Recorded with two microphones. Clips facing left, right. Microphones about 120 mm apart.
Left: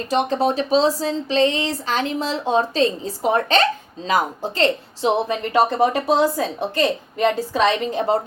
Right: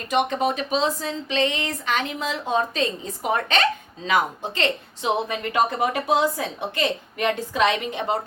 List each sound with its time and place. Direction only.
0.1 s speech: 35° left (ahead or behind)